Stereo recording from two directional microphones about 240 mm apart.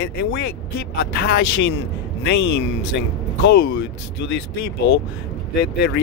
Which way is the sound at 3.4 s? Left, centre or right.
Left.